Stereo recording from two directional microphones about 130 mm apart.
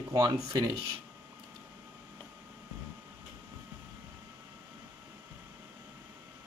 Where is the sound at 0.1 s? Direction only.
30° right (ahead or behind).